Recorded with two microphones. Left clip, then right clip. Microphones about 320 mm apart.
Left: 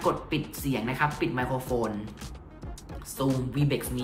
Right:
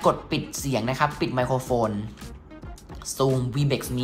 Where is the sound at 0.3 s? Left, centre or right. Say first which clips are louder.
Right 4 dB; centre.